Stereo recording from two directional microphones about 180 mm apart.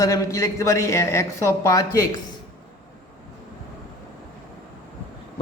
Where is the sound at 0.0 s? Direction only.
15° left (ahead or behind).